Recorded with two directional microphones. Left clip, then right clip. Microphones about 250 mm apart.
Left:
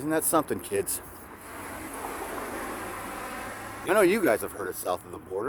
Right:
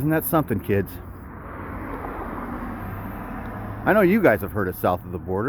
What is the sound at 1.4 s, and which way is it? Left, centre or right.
Vehicle, left.